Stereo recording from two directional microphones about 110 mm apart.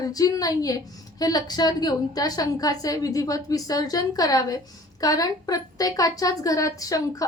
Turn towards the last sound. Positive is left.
turn(degrees=30)  # may be behind; listen again after turning